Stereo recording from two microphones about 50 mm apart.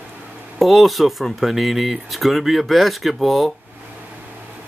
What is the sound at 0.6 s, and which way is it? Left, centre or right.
Speech, centre.